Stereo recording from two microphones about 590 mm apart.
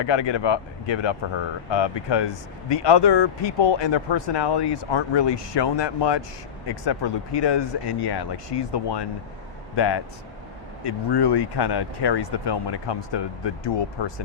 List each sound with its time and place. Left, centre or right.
0.0 s speech: left